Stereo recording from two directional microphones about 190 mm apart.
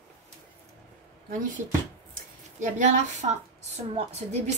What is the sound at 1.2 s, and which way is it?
A woman's voice, 45° right (ahead or behind).